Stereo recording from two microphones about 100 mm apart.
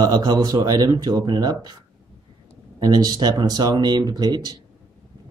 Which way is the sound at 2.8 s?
40° right (ahead or behind).